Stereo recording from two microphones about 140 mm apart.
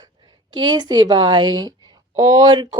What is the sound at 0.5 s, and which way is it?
A woman's voice, 30° right (ahead or behind).